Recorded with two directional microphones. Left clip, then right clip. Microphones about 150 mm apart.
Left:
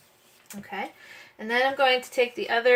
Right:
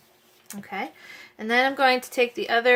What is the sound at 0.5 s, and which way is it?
Speech, 45° right (ahead or behind).